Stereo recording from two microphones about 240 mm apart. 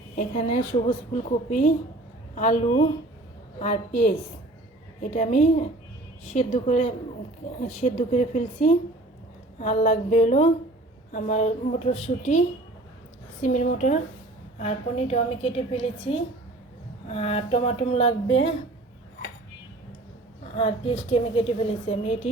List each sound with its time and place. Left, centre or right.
0.2 s a woman's voice: left
20.4 s a woman's voice: left